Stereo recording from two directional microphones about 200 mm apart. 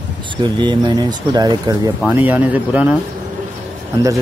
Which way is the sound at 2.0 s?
10° right (ahead or behind).